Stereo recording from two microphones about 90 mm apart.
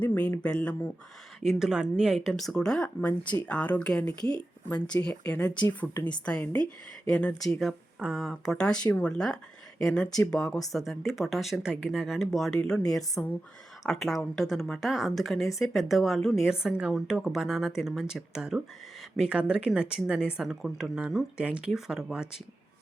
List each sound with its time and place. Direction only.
0.0 s speech: 15° left (ahead or behind)
1.5 s speech: 5° right (ahead or behind)
7.9 s speech: 10° right (ahead or behind)
8.2 s speech: 5° left (ahead or behind)